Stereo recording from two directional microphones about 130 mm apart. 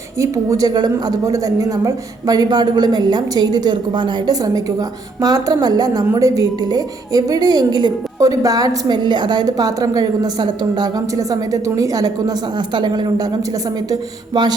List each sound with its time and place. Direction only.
0.2 s a woman's voice: 25° right (ahead or behind)